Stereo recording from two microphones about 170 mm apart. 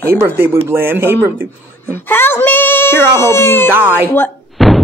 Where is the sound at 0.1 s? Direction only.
15° right (ahead or behind).